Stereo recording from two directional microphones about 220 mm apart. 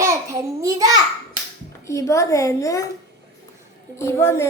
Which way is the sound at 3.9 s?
10° left (ahead or behind).